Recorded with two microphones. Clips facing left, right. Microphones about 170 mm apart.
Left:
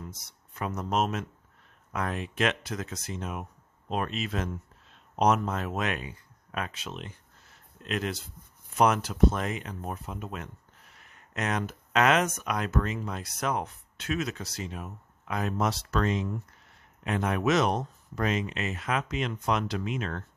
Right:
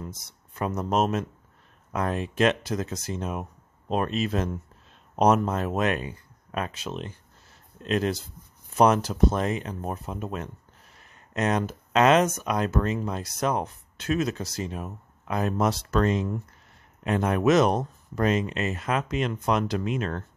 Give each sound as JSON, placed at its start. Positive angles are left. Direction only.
{"t": 0.6, "sound": "speech", "side_deg": -40}